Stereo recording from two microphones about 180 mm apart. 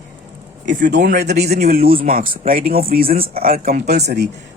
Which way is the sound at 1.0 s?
65° right (ahead or behind).